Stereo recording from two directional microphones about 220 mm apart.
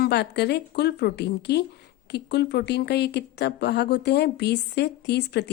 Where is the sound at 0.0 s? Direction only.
50° left (ahead or behind).